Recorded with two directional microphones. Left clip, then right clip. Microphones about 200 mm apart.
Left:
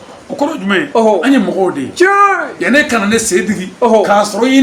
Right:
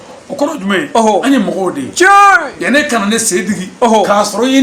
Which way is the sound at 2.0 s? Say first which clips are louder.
Right 3 dB; 45° right (ahead or behind).